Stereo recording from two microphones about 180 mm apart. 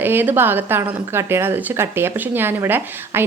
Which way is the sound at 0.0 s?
10° right (ahead or behind).